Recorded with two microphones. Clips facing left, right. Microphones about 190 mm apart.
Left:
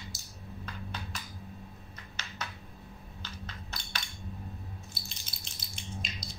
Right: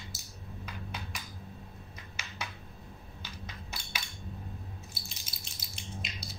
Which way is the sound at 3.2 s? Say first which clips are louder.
Left 1 dB; 10° right (ahead or behind).